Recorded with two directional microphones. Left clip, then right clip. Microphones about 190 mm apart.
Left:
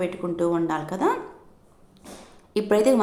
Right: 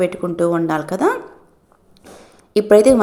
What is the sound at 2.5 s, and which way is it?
Speech, 25° right (ahead or behind).